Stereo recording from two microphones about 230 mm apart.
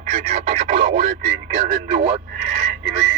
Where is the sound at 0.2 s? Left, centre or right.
Right.